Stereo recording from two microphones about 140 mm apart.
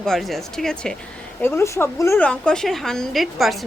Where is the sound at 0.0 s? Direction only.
Centre (ahead or behind).